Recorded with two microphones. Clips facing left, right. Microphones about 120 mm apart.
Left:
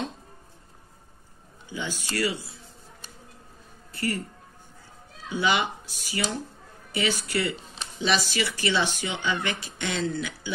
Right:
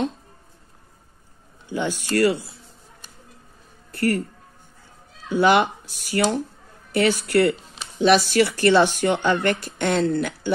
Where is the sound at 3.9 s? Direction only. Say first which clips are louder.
Right 8 dB; 55° right (ahead or behind).